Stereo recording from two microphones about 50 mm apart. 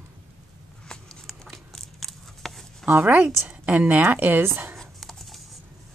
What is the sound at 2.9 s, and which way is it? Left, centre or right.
A woman's voice, right.